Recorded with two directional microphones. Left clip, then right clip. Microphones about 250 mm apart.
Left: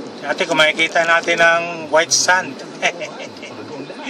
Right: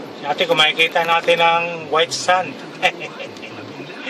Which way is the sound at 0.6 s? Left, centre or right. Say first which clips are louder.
Left 3 dB; left.